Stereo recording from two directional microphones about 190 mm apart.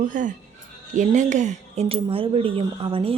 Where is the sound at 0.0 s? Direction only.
40° right (ahead or behind).